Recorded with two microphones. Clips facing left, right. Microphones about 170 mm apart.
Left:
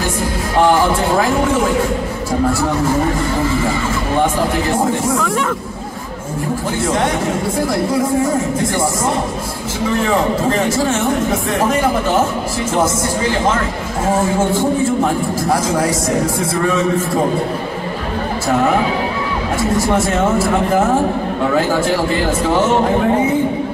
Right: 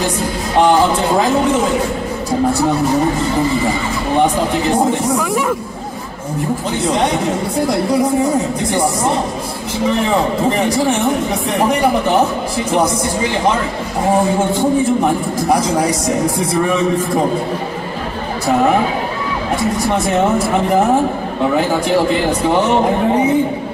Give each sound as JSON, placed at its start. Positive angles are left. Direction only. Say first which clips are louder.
{"t": 0.6, "sound": "speech", "louder": "right 1 dB", "side_deg": -20}
{"t": 4.2, "sound": "speech", "louder": "right 2 dB", "side_deg": -20}
{"t": 10.0, "sound": "speech", "louder": "even", "side_deg": -15}
{"t": 20.1, "sound": "speech", "louder": "right 1 dB", "side_deg": -20}